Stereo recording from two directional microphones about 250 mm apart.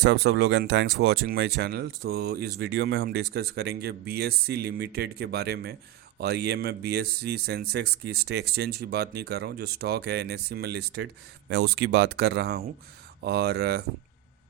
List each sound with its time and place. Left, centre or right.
0.0 s speech: right